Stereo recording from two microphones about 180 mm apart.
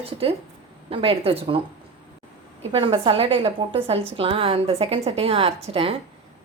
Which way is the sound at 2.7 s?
30° right (ahead or behind).